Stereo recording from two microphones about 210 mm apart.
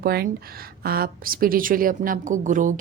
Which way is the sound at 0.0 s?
45° right (ahead or behind).